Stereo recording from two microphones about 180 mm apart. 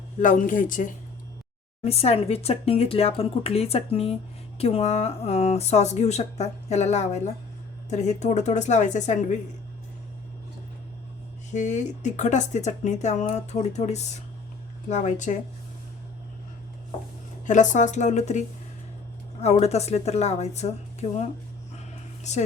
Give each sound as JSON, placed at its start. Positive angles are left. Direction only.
{"t": 0.2, "sound": "speech", "side_deg": 45}
{"t": 1.8, "sound": "speech", "side_deg": 35}
{"t": 11.5, "sound": "speech", "side_deg": 40}
{"t": 17.4, "sound": "speech", "side_deg": 45}